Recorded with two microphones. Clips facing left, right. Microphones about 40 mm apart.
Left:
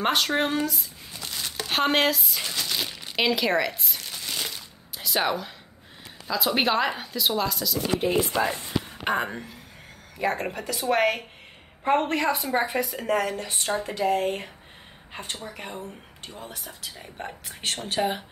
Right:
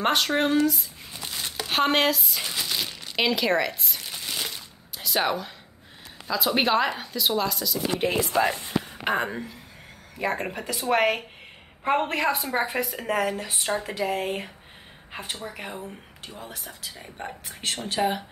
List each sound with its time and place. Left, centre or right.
0.0 s a woman's voice: centre
0.7 s squish: centre
2.5 s crumpling: centre
3.2 s a woman's voice: centre
4.1 s crumpling: centre
6.2 s a woman's voice: centre
8.3 s speech: right
9.0 s a woman's voice: centre